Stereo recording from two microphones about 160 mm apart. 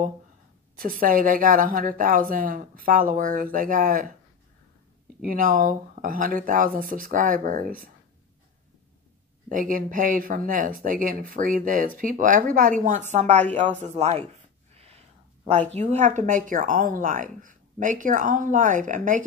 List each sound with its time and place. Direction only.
0.7 s speech: 60° right (ahead or behind)
5.2 s speech: 60° right (ahead or behind)
9.5 s speech: 55° right (ahead or behind)
14.7 s a sound: 40° right (ahead or behind)
15.7 s speech: 45° right (ahead or behind)